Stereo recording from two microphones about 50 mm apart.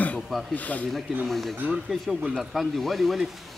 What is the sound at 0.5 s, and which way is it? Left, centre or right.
Speech, left.